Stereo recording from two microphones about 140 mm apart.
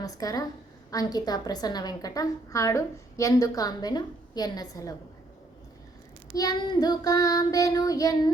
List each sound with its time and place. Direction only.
0.0 s a woman's voice: 25° left (ahead or behind)
6.3 s a woman's voice: 25° left (ahead or behind)